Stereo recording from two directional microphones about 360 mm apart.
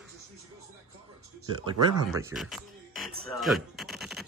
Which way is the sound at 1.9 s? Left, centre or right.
Centre.